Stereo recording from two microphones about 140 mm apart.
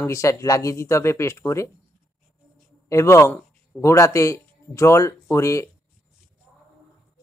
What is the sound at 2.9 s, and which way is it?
A man's voice, 20° left (ahead or behind).